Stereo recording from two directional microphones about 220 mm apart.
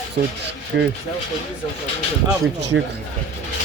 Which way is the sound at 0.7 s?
50° right (ahead or behind).